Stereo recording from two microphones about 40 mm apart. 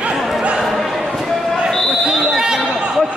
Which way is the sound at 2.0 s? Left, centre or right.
Centre.